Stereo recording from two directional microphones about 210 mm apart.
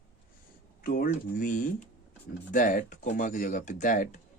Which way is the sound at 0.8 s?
45° left (ahead or behind).